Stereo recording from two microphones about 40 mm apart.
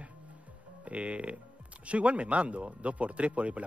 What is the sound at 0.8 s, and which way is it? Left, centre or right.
Speech, right.